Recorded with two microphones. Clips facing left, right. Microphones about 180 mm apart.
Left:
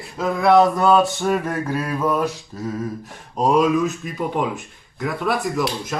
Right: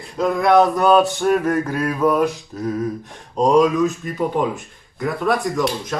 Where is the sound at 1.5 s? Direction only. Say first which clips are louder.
Right 2 dB; 5° left (ahead or behind).